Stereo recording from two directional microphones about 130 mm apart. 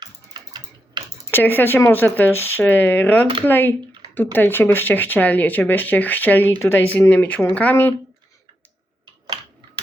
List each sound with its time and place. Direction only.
0.0 s typing: 35° right (ahead or behind)
1.3 s speech: 15° left (ahead or behind)